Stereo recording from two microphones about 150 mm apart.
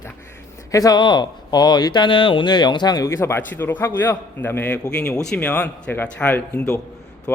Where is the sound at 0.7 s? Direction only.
25° left (ahead or behind).